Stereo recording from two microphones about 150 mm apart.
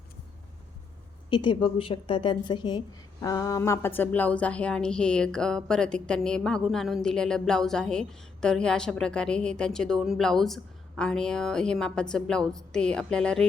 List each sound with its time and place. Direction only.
1.3 s a woman's voice: 30° left (ahead or behind); by 13.5 s 5° left (ahead or behind)